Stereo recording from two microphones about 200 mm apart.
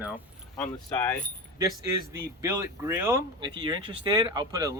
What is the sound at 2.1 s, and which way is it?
Speech, 15° right (ahead or behind).